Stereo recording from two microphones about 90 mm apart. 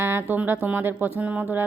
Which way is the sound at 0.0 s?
25° right (ahead or behind).